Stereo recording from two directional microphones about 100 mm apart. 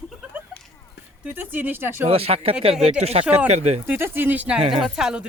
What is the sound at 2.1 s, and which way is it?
Speech, 85° right.